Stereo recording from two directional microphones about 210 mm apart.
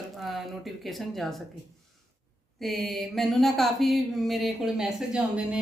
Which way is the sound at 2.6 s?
Centre (ahead or behind).